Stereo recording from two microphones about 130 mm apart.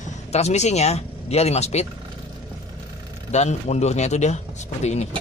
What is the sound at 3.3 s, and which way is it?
Speech, 60° left (ahead or behind).